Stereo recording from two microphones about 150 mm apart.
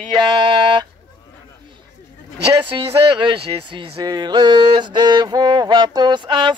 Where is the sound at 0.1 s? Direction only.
30° right (ahead or behind).